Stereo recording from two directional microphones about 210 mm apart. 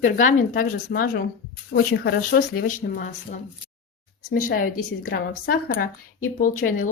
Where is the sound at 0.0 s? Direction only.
35° left (ahead or behind).